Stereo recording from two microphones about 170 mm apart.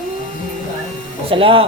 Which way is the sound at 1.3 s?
30° right (ahead or behind).